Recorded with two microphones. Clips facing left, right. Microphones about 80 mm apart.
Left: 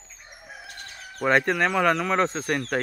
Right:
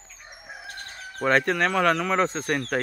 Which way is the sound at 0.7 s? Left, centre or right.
Right.